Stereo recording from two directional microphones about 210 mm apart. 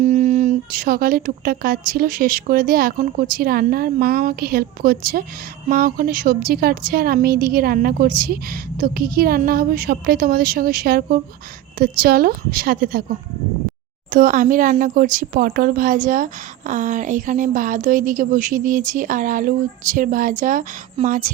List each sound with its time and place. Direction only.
0.0 s a woman's voice: 35° right (ahead or behind)
14.1 s speech: 40° right (ahead or behind)